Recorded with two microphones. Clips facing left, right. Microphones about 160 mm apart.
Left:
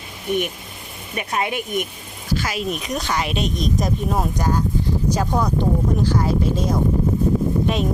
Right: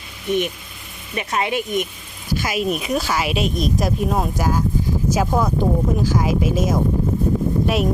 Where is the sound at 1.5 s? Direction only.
50° left (ahead or behind).